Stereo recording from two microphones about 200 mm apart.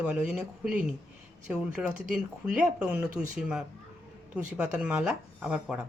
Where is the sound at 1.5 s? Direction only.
5° right (ahead or behind).